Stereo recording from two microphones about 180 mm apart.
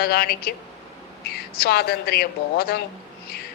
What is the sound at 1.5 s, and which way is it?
A woman's voice, 60° left (ahead or behind).